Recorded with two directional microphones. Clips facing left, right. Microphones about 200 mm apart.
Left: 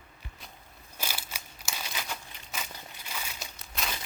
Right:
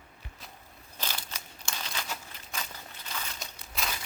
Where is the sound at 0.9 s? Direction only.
10° left (ahead or behind).